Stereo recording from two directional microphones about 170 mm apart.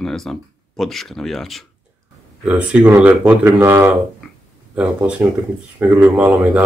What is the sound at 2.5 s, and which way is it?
Speech, 10° right (ahead or behind).